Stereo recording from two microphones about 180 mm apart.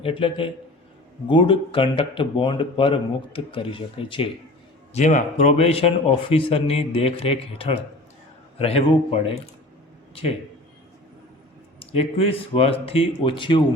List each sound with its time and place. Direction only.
0.0 s speech: 30° left (ahead or behind)
4.9 s speech: 40° left (ahead or behind)
11.8 s speech: 35° left (ahead or behind)